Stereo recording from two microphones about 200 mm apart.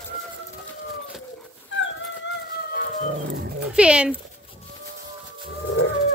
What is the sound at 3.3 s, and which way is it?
Dog, 50° right (ahead or behind).